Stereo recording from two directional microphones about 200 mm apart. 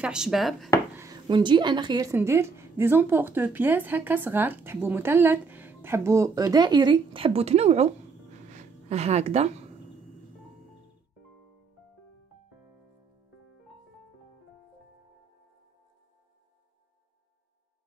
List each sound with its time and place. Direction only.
0.0 s speech: 5° right (ahead or behind)
0.9 s a woman's voice: 20° right (ahead or behind)
8.5 s a sound: 35° right (ahead or behind)